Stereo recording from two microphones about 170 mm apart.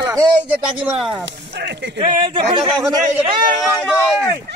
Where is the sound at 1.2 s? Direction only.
85° right.